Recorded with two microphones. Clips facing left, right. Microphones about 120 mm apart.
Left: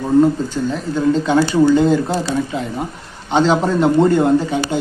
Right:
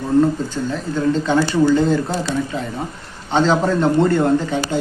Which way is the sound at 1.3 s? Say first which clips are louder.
Left 2 dB; 10° left (ahead or behind).